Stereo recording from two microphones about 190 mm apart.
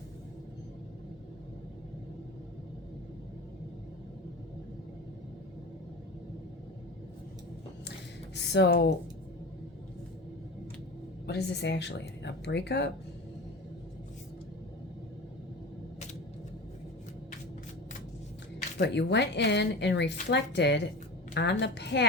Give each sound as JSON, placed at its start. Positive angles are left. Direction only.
{"t": 8.4, "sound": "speech", "side_deg": 65}
{"t": 11.3, "sound": "speech", "side_deg": 60}
{"t": 18.8, "sound": "speech", "side_deg": 65}